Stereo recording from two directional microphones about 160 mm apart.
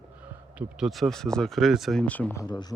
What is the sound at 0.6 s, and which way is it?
Speech, 5° right (ahead or behind).